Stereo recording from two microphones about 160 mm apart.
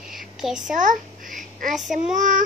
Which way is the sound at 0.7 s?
55° right (ahead or behind).